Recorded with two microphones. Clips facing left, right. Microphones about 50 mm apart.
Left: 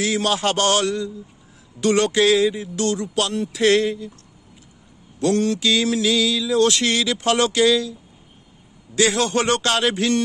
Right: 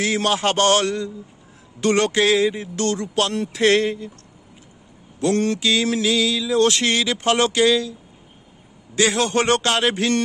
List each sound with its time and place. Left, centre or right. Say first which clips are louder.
0.0 s speech: right 1 dB; right
5.3 s speech: even; right
5.6 s speech: even; right
8.9 s speech: even; right